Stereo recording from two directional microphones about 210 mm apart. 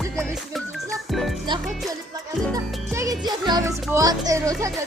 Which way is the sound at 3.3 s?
20° right (ahead or behind).